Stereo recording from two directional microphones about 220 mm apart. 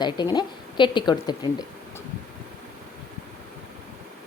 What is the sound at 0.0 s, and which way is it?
Speech, 20° left (ahead or behind).